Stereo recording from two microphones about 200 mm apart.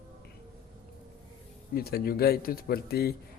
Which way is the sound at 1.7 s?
50° left (ahead or behind).